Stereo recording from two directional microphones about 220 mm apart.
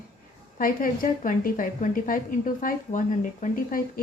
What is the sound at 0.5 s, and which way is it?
A woman's voice, 40° left (ahead or behind).